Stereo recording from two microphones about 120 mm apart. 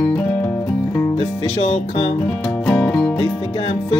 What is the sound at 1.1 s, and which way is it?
Music, 60° left (ahead or behind).